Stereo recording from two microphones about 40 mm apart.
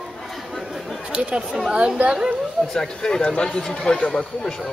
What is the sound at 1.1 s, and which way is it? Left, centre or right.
Speech, right.